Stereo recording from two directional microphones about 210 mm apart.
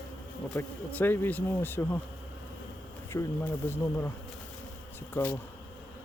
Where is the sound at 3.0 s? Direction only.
10° left (ahead or behind).